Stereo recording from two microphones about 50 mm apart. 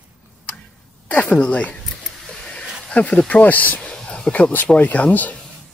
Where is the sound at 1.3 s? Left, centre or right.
Left.